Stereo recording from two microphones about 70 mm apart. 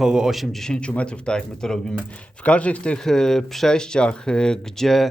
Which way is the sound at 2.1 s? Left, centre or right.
Centre.